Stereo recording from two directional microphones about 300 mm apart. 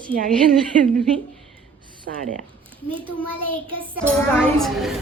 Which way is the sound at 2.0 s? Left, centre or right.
Right.